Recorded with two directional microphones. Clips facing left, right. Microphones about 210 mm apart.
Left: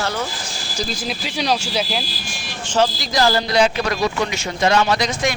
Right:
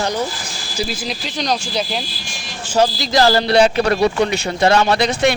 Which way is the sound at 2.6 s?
10° right (ahead or behind).